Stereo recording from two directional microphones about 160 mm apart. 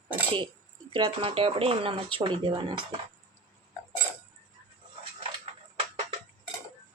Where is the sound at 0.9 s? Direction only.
35° right (ahead or behind).